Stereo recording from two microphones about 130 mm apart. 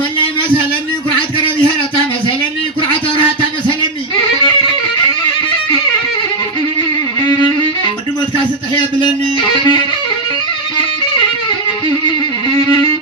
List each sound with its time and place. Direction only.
9.0 s music: 35° left (ahead or behind)